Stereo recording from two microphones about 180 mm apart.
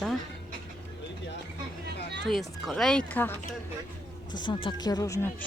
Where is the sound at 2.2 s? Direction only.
Centre (ahead or behind).